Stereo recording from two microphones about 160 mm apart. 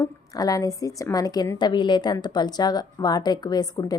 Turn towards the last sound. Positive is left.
turn(degrees=25)  # may be behind; listen again after turning